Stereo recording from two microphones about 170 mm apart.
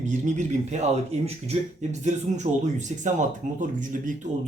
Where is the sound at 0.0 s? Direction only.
45° right (ahead or behind).